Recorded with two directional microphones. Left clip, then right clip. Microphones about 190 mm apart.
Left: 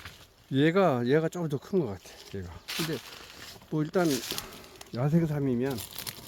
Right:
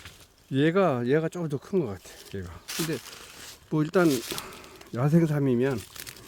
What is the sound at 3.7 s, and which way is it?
Speech, 50° right (ahead or behind).